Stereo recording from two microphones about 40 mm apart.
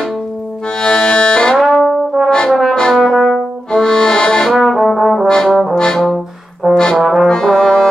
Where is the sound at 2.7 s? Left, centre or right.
Centre.